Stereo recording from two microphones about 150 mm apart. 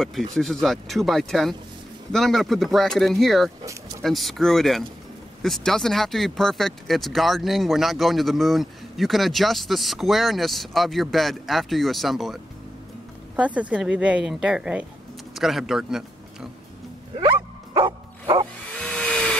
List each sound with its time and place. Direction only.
0.0 s speech: centre (ahead or behind)
13.4 s a woman's voice: 10° right (ahead or behind)
17.7 s music: 35° right (ahead or behind)
18.7 s a sound: 5° left (ahead or behind)